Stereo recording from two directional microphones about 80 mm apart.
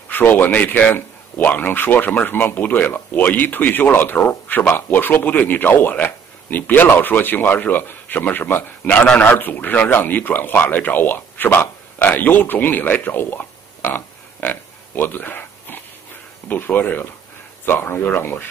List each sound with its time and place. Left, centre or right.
0.1 s a man's voice: left